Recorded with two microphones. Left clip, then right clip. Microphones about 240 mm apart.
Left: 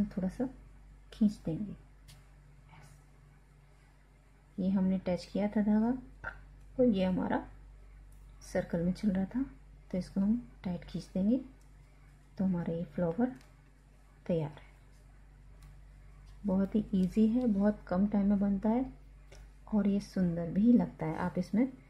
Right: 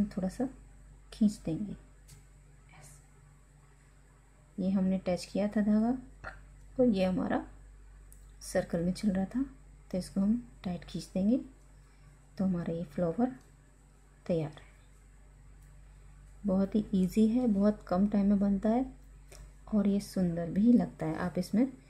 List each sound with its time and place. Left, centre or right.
0.1 s speech: centre
4.6 s speech: centre
12.4 s speech: centre
16.4 s speech: centre